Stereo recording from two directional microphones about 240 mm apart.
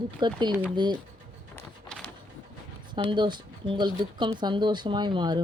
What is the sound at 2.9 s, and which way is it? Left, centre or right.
Speech, centre.